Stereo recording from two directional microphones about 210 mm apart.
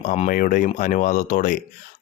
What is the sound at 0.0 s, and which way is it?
Speech, 35° left (ahead or behind).